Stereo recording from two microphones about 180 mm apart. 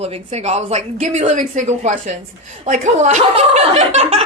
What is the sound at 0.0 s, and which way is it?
Speech, 35° right (ahead or behind).